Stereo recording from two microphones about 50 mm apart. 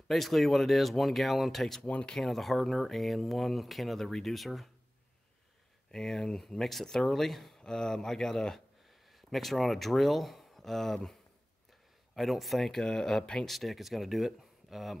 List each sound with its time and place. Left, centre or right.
0.1 s speech: centre
1.9 s speech: left
2.1 s speech: centre
5.9 s speech: centre
7.6 s speech: centre
12.2 s speech: centre
13.5 s speech: centre